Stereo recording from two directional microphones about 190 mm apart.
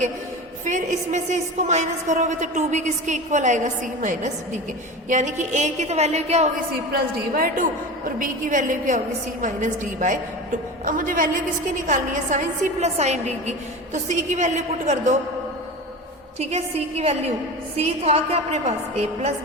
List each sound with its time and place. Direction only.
0.6 s a woman's voice: 40° right (ahead or behind)
7.3 s a woman's voice: 45° right (ahead or behind)
16.4 s a woman's voice: 35° right (ahead or behind)